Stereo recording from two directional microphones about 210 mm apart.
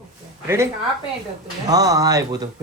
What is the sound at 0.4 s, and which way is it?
Speech, 15° right (ahead or behind).